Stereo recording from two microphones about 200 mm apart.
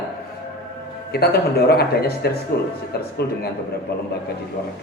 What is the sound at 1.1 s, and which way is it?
Speech, 50° left (ahead or behind).